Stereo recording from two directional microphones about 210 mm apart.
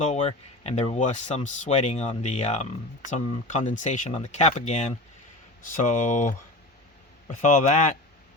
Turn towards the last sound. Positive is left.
turn(degrees=35)  # may be behind; listen again after turning